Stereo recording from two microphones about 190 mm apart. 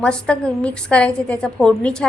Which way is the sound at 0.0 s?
5° left (ahead or behind).